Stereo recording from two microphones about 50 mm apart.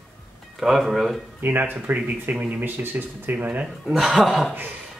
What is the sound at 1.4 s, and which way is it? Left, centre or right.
Speech, right.